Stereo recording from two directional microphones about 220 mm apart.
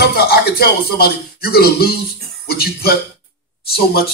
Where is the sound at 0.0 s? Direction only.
45° left (ahead or behind).